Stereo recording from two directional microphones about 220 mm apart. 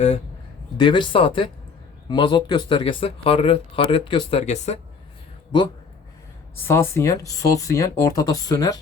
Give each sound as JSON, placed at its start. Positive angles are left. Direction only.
{"t": 0.8, "sound": "speech", "side_deg": 20}
{"t": 6.7, "sound": "speech", "side_deg": 10}